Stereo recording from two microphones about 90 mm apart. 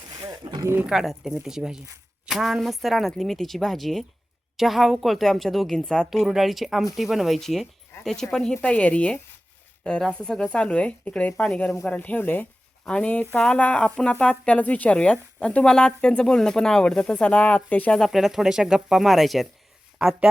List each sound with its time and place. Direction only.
0.2 s wild animals: 45° right (ahead or behind)
0.9 s speech: 5° right (ahead or behind)
6.1 s speech: 5° right (ahead or behind)
8.6 s speech: 15° left (ahead or behind)
18.0 s speech: centre (ahead or behind)